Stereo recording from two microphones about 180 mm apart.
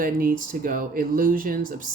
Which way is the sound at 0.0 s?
55° right (ahead or behind).